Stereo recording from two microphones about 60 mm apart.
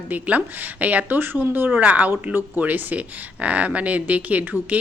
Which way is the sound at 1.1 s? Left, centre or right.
Right.